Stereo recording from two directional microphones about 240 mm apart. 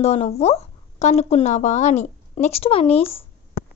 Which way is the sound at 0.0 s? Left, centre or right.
Left.